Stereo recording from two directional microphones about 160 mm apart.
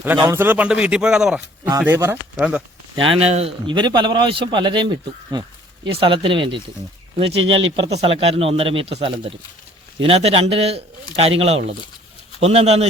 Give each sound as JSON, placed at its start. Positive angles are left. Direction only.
{"t": 0.3, "sound": "speech", "side_deg": -15}
{"t": 1.8, "sound": "speech", "side_deg": -15}
{"t": 2.9, "sound": "speech", "side_deg": -35}